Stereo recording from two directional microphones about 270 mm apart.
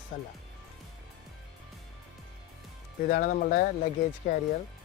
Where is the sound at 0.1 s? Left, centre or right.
Left.